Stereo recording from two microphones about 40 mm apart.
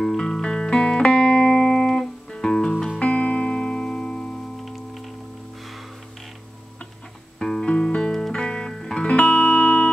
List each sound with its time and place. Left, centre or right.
0.0 s music: centre; by 1.9 s left
1.9 s guitar: centre
3.0 s music: left
4.6 s music: centre
7.3 s music: centre
9.0 s music: left